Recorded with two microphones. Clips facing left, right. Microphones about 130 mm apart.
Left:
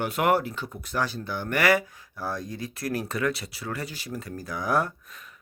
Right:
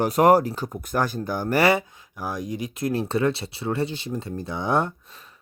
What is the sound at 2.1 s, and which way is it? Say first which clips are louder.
Speech: right 3 dB; 15° right (ahead or behind).